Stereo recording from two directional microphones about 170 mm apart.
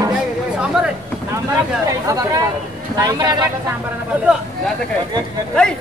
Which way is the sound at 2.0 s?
20° right (ahead or behind).